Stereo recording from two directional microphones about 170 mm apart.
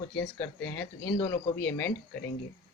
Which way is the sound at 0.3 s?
15° left (ahead or behind).